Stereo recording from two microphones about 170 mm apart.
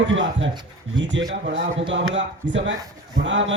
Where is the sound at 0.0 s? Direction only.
90° right.